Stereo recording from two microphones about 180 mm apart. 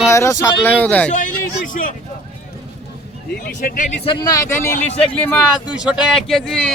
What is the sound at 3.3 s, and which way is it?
Speech, 55° left (ahead or behind).